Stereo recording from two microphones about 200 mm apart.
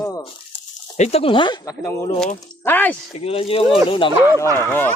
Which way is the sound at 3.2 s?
30° left (ahead or behind).